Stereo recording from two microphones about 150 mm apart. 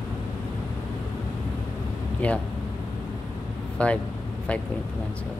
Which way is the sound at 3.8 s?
10° left (ahead or behind).